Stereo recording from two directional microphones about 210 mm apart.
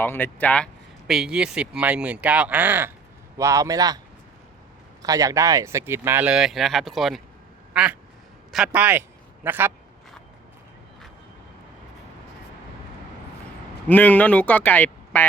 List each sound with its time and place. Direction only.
0.0 s speech: 10° left (ahead or behind); by 4.0 s 15° right (ahead or behind)
5.0 s speech: 15° right (ahead or behind); by 7.2 s centre (ahead or behind)
7.7 s quack: 5° right (ahead or behind)
8.5 s a man's voice: 5° right (ahead or behind)
13.8 s speech: 10° left (ahead or behind)